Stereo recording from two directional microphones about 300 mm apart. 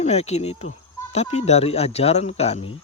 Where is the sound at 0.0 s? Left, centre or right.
Left.